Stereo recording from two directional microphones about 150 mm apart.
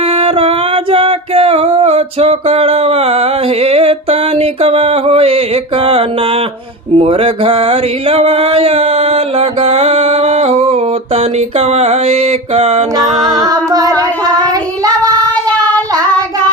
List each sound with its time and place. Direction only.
0.2 s singing: 40° right (ahead or behind)
6.9 s a sound: 40° right (ahead or behind)
13.0 s music: 25° right (ahead or behind)